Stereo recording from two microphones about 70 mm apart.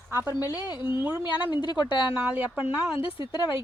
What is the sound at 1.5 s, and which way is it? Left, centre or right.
Speech, left.